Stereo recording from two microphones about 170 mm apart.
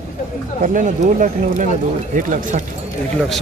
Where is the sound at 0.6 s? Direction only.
50° right (ahead or behind).